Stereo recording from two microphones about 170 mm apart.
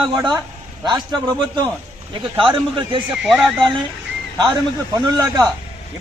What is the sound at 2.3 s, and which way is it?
Speech, 30° right (ahead or behind).